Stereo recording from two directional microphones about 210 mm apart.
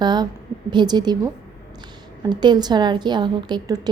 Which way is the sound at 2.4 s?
20° right (ahead or behind).